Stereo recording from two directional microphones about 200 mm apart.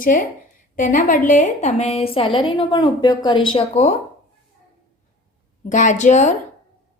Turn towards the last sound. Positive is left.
turn(degrees=35)  # may be behind; listen again after turning